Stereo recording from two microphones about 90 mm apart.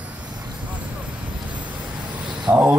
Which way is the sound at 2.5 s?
20° right (ahead or behind).